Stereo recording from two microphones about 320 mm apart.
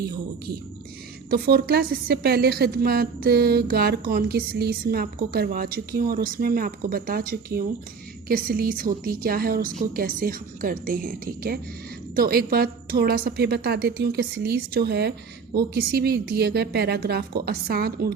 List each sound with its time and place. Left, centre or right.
1.3 s a woman's voice: right